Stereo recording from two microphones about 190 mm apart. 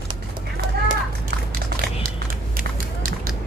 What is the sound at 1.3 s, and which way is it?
Biting, 55° right (ahead or behind).